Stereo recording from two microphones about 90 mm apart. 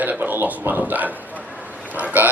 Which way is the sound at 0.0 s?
20° right (ahead or behind).